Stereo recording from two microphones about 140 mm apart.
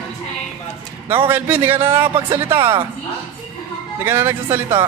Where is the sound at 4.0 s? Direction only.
15° right (ahead or behind).